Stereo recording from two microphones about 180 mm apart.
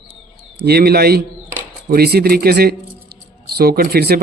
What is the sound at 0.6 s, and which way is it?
Speech, 60° right (ahead or behind).